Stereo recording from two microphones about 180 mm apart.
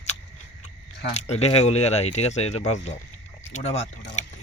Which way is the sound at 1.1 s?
35° left (ahead or behind).